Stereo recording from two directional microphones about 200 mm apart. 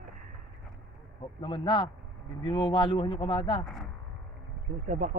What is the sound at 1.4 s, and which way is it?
Speech, 25° left (ahead or behind).